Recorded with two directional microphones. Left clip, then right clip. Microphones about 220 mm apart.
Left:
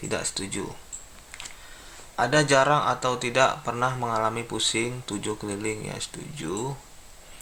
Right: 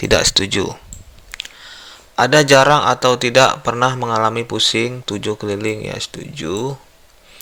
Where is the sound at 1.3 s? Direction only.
40° right (ahead or behind).